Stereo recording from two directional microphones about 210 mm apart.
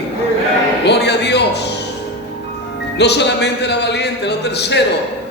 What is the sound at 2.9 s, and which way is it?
A man's voice, 55° left (ahead or behind).